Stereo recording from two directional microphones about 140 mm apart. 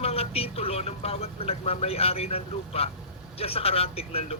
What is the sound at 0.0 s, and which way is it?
Speech, 45° left (ahead or behind).